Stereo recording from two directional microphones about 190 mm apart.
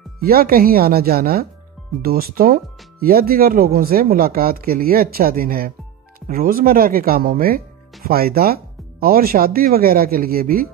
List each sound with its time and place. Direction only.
0.2 s speech: 50° right (ahead or behind)